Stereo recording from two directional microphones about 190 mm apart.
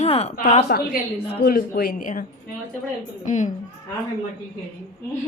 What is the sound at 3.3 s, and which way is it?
Speech, 40° left (ahead or behind).